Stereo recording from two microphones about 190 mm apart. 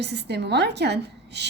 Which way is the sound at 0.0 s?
60° right (ahead or behind).